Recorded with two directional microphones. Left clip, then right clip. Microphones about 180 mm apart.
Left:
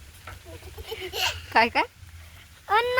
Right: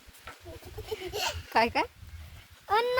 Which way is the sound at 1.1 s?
40° right (ahead or behind).